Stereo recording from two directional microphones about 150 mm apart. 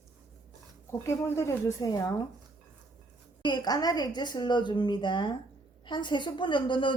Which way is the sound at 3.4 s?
30° left (ahead or behind).